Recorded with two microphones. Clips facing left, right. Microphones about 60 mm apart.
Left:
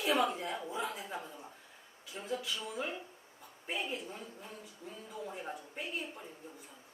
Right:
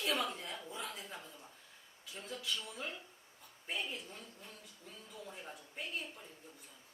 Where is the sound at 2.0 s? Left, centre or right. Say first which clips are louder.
Left 6 dB; centre.